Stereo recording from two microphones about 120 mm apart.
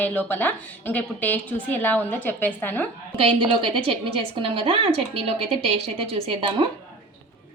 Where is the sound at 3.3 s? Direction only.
45° right (ahead or behind).